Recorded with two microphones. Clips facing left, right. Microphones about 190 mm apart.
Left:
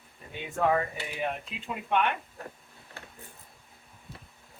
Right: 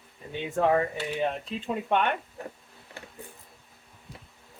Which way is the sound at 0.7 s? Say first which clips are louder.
Right 3 dB; 35° right (ahead or behind).